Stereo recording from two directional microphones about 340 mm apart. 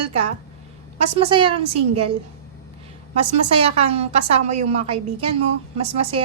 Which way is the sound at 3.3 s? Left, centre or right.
Centre.